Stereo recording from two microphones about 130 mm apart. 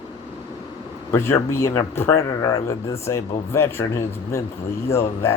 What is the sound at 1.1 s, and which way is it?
A man's voice, 20° left (ahead or behind).